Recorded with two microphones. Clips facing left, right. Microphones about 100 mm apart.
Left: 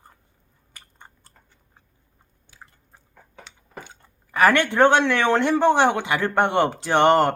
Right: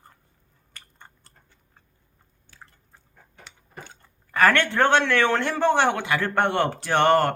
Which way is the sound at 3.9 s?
15° left (ahead or behind).